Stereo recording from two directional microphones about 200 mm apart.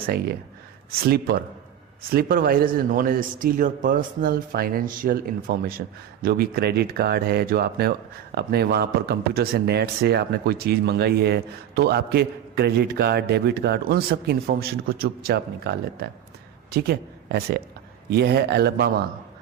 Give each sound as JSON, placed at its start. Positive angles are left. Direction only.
{"t": 0.9, "sound": "speech", "side_deg": -50}